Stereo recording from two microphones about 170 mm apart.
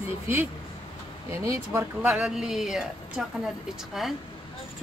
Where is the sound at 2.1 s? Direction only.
5° right (ahead or behind).